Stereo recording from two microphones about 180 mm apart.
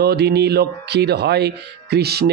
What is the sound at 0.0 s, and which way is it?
Speech, 65° right (ahead or behind).